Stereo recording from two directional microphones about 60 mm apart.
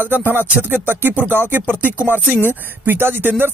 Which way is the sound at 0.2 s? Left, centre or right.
Right.